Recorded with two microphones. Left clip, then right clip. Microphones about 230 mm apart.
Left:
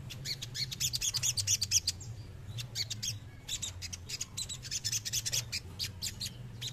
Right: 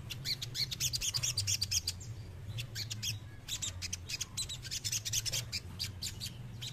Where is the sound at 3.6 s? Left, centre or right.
Centre.